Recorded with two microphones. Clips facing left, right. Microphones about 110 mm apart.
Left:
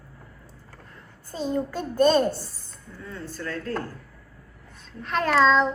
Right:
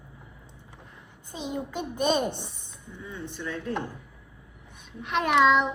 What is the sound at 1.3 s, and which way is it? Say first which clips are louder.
Speech: left 6 dB; 15° right (ahead or behind).